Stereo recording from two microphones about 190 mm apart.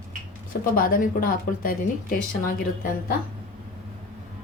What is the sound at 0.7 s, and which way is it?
Speech, 50° left (ahead or behind).